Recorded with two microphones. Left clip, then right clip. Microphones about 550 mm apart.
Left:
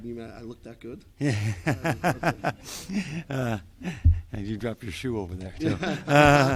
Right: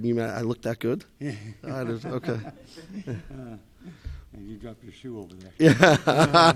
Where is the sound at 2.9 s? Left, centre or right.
Left.